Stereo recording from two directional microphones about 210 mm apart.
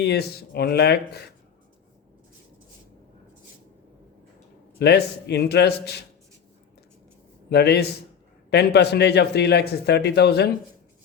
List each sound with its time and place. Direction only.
0.0 s speech: 50° left (ahead or behind)
4.8 s speech: 55° left (ahead or behind)
7.5 s speech: 50° left (ahead or behind)